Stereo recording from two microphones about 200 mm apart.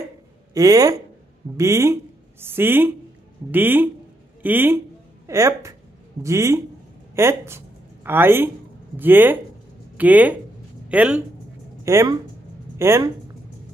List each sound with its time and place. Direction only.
0.6 s speech: 15° right (ahead or behind)